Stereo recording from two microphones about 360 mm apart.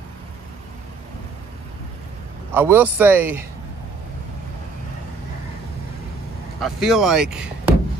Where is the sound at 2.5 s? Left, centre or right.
Centre.